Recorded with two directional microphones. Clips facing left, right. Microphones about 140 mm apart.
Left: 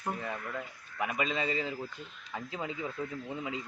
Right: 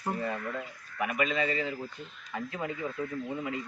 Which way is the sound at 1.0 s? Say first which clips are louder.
Right 3 dB; 20° left (ahead or behind).